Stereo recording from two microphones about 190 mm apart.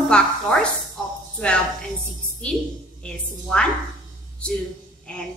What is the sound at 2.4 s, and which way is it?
Speech, 5° left (ahead or behind).